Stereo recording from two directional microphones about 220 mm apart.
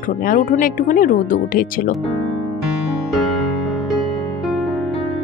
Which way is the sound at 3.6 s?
Centre (ahead or behind).